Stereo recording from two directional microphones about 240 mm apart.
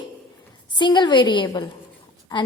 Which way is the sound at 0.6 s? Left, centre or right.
Centre.